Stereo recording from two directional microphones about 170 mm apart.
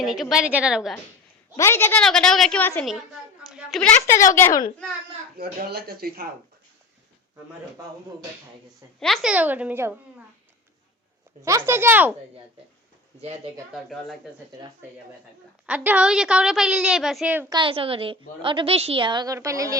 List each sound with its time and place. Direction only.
0.0 s a woman's voice: centre (ahead or behind)
1.5 s a woman's voice: 15° left (ahead or behind)
3.5 s a sound: 5° right (ahead or behind)
3.8 s a woman's voice: 10° left (ahead or behind)
5.4 s speech: 65° right (ahead or behind)
9.0 s a woman's voice: centre (ahead or behind)
9.3 s a woman's voice: 10° right (ahead or behind)
11.4 s a woman's voice: 15° right (ahead or behind)
13.7 s a woman's voice: centre (ahead or behind)
15.6 s a woman's voice: 10° right (ahead or behind)
17.5 s a woman's voice: 30° right (ahead or behind)